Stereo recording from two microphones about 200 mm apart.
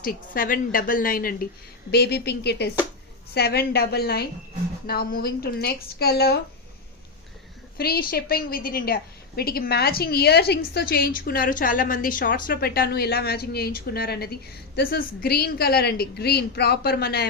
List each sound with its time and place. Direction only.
0.0 s a woman's voice: 45° left (ahead or behind)
7.8 s a woman's voice: 50° left (ahead or behind)